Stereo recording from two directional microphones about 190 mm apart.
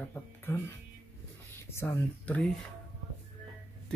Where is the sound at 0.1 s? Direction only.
10° left (ahead or behind).